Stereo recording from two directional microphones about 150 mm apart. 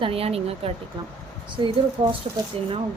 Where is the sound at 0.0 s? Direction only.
40° right (ahead or behind).